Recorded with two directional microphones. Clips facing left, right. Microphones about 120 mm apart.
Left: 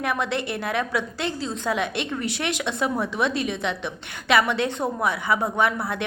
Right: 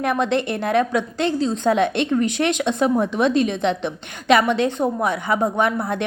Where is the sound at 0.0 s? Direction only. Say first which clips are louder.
Right 6 dB; 25° right (ahead or behind).